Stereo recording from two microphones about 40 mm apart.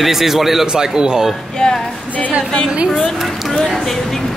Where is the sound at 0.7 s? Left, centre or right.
Right.